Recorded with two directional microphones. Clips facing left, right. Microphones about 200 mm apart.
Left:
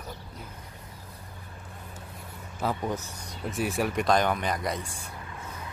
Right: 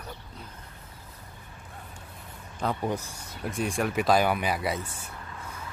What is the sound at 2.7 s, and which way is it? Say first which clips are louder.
Speech: right 1 dB; 10° right (ahead or behind).